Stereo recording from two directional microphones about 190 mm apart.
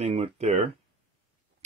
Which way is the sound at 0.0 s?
35° right (ahead or behind).